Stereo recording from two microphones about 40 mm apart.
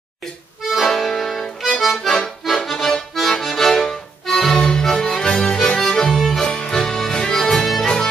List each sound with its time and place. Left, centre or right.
0.7 s accordion: centre
6.4 s music: left; by 7.8 s centre
7.8 s music: centre